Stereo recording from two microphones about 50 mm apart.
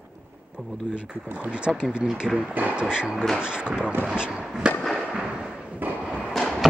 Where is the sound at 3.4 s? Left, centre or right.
Centre.